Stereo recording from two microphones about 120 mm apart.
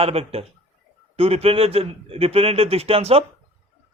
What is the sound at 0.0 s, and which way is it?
Speech, 55° right (ahead or behind).